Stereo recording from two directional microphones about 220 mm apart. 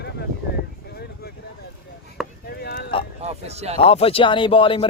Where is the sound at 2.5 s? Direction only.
45° left (ahead or behind).